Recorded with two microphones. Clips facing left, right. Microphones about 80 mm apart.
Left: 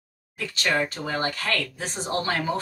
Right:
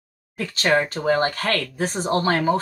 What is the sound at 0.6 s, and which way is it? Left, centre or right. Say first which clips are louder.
Speech: right 5 dB; right.